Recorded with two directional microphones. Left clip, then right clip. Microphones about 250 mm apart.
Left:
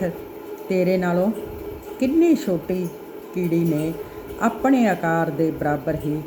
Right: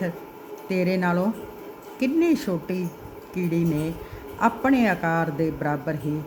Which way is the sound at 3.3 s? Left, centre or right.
Centre.